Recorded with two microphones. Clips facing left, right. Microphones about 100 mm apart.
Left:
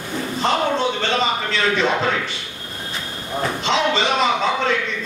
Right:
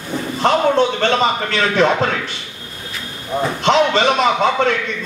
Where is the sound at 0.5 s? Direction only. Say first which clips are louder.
Right 6 dB; 55° right (ahead or behind).